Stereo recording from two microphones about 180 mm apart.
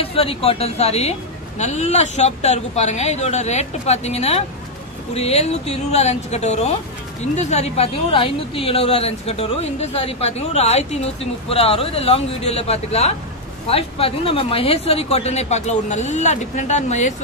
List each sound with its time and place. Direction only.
0.0 s speech: 30° left (ahead or behind)